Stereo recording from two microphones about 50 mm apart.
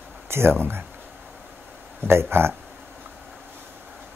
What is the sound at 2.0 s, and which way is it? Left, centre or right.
Speech, right.